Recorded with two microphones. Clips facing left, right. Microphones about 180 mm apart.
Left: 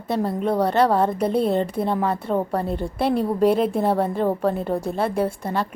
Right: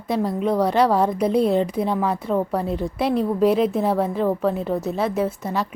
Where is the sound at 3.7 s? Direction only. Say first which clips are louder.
Even; 5° right (ahead or behind).